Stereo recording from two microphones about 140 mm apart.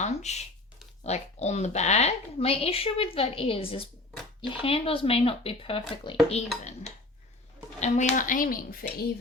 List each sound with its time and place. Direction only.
0.0 s speech: 55° left (ahead or behind)
7.8 s speech: 55° left (ahead or behind); by 8.9 s 85° left